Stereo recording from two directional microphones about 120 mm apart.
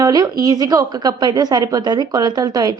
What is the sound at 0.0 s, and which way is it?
A woman's voice, 30° right (ahead or behind).